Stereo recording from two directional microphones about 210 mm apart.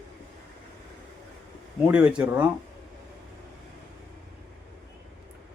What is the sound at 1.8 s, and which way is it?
Speech, 5° right (ahead or behind).